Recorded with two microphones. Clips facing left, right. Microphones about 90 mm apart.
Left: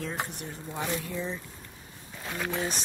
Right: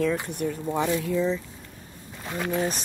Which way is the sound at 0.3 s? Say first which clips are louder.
Right 11 dB; 55° right (ahead or behind).